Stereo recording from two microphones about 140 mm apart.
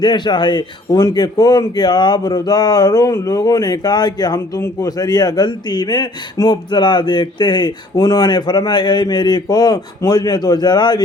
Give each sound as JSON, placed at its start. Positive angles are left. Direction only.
{"t": 0.0, "sound": "a man's voice", "side_deg": 30}